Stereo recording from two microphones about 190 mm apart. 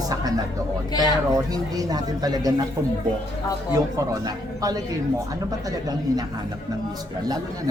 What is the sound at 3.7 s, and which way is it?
A man's voice, 15° right (ahead or behind).